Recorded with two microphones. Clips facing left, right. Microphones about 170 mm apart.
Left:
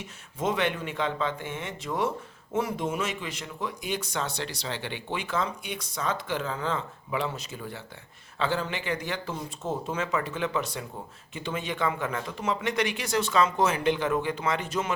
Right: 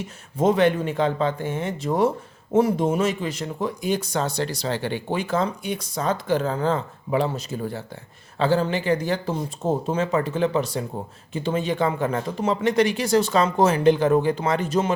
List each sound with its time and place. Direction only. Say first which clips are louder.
0.3 s speech: right 9 dB; 40° right (ahead or behind)